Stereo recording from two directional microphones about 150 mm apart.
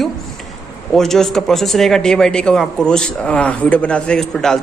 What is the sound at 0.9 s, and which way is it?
A woman's voice, 5° left (ahead or behind).